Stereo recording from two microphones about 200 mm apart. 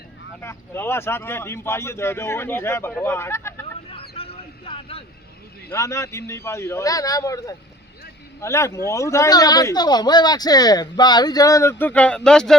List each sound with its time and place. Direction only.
0.4 s speech: 10° left (ahead or behind)
4.1 s a sound: 30° left (ahead or behind)
5.6 s speech: 15° left (ahead or behind)